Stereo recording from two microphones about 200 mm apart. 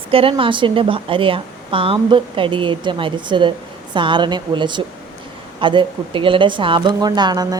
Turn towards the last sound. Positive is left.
turn(degrees=-20)  # may be behind; listen again after turning